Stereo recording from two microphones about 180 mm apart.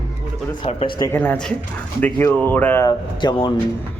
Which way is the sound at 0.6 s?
30° left (ahead or behind).